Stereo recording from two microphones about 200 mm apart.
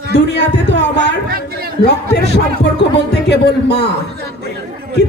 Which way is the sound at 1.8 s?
55° left (ahead or behind).